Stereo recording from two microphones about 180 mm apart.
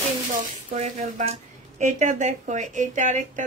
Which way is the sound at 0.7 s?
40° right (ahead or behind).